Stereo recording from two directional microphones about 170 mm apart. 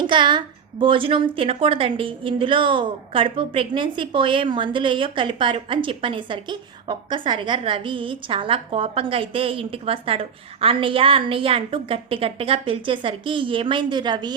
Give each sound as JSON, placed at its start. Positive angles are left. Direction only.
{"t": 0.0, "sound": "a woman's voice", "side_deg": -25}